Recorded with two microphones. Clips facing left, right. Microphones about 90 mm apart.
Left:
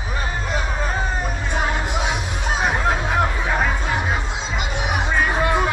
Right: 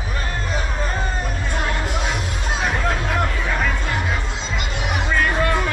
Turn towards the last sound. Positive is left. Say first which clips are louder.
# left 1 dB
turn(degrees=10)  # may be behind; listen again after turning